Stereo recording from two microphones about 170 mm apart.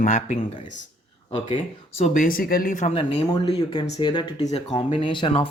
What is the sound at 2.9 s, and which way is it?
Speech, 35° left (ahead or behind).